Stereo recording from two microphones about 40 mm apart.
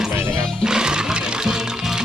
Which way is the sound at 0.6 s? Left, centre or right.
Centre.